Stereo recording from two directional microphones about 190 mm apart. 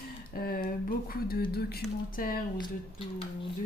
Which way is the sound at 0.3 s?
50° left (ahead or behind).